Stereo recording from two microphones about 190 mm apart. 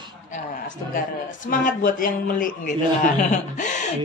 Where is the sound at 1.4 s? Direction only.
45° left (ahead or behind).